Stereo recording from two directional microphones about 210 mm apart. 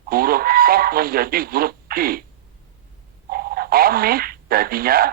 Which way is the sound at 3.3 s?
45° right (ahead or behind).